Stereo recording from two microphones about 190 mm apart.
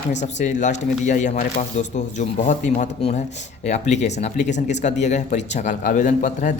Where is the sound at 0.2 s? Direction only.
40° left (ahead or behind).